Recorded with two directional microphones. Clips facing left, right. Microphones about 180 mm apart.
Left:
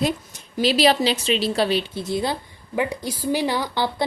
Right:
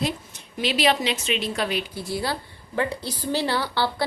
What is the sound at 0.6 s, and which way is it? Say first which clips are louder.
A woman's voice: left 4 dB; 35° left (ahead or behind).